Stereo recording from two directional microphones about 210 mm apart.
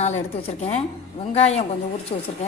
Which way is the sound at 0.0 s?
30° left (ahead or behind).